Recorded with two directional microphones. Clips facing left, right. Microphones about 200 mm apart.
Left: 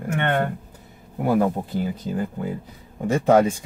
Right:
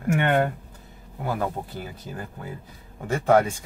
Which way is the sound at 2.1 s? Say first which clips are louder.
Left 9 dB; 20° left (ahead or behind).